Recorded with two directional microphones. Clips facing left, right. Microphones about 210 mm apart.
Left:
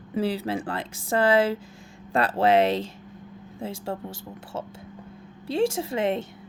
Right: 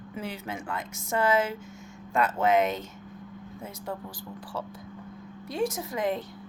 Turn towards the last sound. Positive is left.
turn(degrees=25)  # may be behind; listen again after turning